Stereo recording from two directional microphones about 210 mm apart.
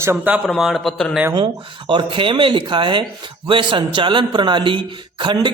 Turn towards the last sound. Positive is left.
turn(degrees=-20)  # may be behind; listen again after turning